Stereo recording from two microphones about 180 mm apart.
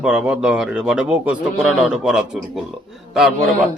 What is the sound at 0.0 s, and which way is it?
A man's voice, 5° right (ahead or behind).